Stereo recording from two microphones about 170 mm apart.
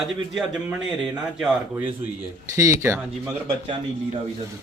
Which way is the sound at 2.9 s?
5° right (ahead or behind).